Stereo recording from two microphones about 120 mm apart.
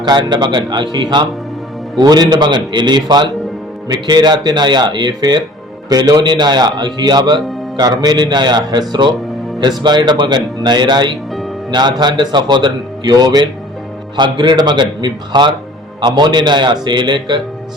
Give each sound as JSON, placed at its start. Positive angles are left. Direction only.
{"t": 0.0, "sound": "a man's voice", "side_deg": -40}